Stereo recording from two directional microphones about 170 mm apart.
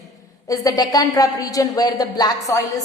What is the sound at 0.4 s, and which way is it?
A woman's voice, 20° left (ahead or behind).